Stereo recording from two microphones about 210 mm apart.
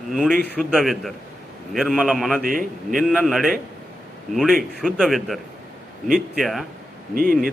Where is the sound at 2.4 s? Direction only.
40° right (ahead or behind).